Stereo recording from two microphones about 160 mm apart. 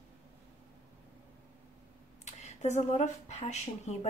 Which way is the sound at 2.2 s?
45° left (ahead or behind).